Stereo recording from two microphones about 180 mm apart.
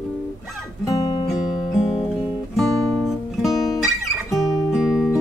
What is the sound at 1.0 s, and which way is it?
Music, 20° left (ahead or behind).